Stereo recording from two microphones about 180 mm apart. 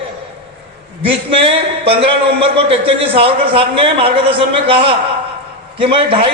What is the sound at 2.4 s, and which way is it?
A man's voice, 30° right (ahead or behind).